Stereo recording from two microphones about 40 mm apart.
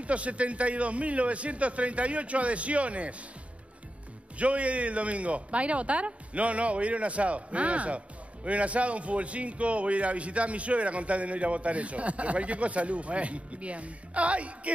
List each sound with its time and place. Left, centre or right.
0.0 s a man's voice: right
4.4 s a man's voice: right